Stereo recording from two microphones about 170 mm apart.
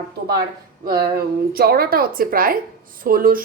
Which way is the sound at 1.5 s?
65° right (ahead or behind).